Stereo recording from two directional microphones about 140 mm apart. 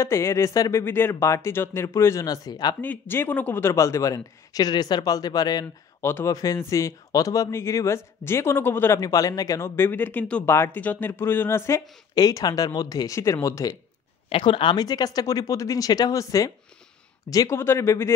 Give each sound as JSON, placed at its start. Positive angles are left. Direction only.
{"t": 0.0, "sound": "speech", "side_deg": 20}
{"t": 2.8, "sound": "speech", "side_deg": 15}
{"t": 14.3, "sound": "speech", "side_deg": 35}